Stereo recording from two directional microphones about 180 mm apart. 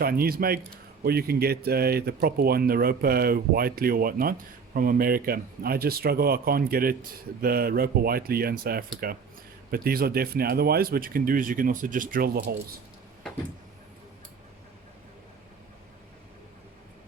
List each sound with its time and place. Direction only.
0.0 s speech: 55° right (ahead or behind)